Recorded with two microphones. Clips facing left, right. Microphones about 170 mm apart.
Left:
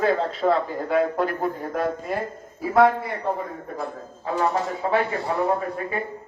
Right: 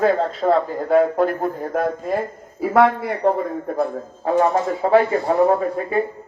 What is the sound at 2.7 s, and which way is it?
A man's voice, 75° right (ahead or behind).